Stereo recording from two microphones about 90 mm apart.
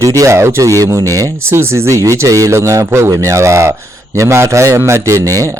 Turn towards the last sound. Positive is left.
turn(degrees=-40)  # may be behind; listen again after turning